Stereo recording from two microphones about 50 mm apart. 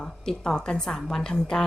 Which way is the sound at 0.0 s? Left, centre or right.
Centre.